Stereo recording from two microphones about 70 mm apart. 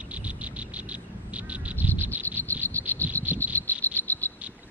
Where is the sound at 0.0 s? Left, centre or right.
Centre.